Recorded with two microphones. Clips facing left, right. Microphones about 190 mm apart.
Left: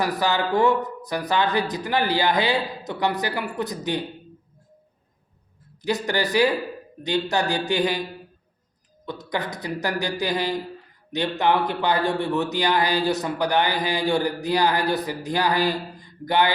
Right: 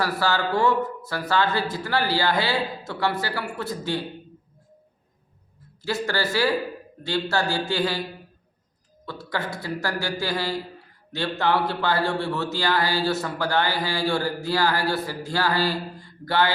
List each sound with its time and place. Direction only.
0.0 s speech: 20° left (ahead or behind)
5.8 s speech: 20° left (ahead or behind)
9.0 s a man's voice: 20° left (ahead or behind)